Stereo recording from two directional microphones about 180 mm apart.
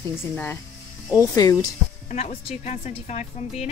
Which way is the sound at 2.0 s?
40° left (ahead or behind).